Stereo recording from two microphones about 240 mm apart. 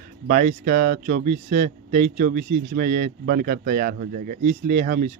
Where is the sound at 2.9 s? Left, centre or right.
Right.